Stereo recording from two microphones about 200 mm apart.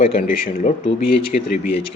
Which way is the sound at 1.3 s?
40° left (ahead or behind).